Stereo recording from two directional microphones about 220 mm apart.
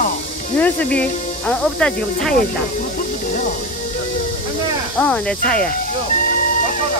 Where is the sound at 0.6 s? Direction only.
5° left (ahead or behind).